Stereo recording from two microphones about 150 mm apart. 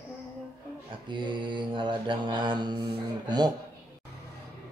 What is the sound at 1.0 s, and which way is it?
A man's voice, 30° right (ahead or behind).